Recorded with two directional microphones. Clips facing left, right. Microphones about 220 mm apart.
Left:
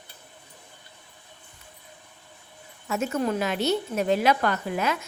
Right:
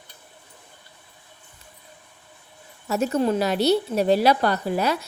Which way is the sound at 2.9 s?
35° right (ahead or behind).